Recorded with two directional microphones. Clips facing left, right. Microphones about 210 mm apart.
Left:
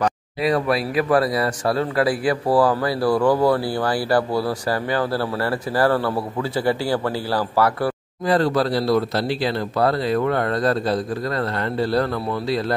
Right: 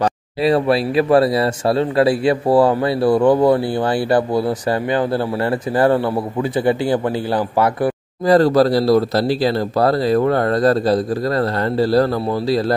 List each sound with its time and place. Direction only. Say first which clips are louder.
0.0 s speech: right 4 dB; 30° right (ahead or behind)
8.3 s speech: right 6 dB; 40° right (ahead or behind)